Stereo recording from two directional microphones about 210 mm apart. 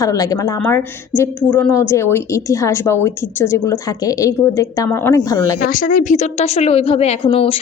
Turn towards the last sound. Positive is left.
turn(degrees=25)  # may be behind; listen again after turning